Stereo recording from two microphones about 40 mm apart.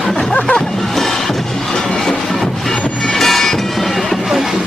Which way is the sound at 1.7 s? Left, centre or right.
Centre.